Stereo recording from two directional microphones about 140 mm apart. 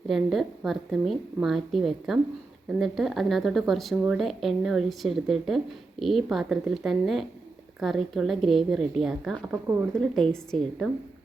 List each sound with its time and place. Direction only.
0.1 s a woman's voice: centre (ahead or behind)